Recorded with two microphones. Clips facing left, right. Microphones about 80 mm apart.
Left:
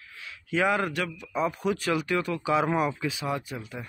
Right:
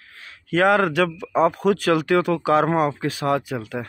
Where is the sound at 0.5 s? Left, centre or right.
Right.